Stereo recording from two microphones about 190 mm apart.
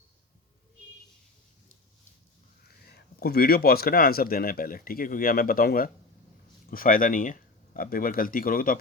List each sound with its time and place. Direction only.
2.8 s speech: 55° left (ahead or behind)